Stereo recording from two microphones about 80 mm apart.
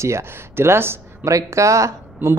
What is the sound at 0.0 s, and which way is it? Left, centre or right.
Speech, right.